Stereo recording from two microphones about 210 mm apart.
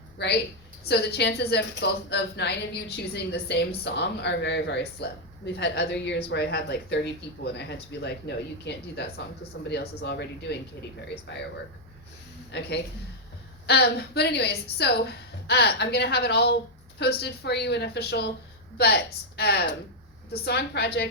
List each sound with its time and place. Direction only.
0.2 s a woman's voice: 50° left (ahead or behind)
12.5 s a woman's voice: 55° left (ahead or behind)